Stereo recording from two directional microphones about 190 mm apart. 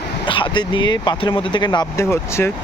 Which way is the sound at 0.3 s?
25° left (ahead or behind).